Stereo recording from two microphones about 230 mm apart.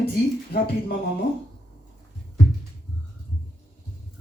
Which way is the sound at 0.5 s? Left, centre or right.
Left.